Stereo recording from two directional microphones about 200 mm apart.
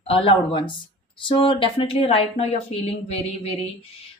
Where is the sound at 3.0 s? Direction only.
30° left (ahead or behind).